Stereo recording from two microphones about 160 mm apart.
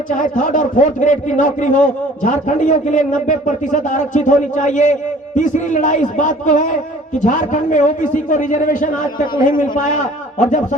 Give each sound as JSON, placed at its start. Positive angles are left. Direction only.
{"t": 0.1, "sound": "a man's voice", "side_deg": 55}